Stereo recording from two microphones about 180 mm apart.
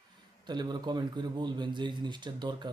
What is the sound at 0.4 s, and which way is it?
A man's voice, 25° right (ahead or behind).